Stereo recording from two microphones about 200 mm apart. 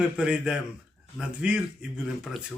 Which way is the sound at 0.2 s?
5° right (ahead or behind).